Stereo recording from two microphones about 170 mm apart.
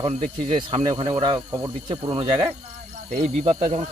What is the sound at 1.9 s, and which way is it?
Speech, 35° right (ahead or behind).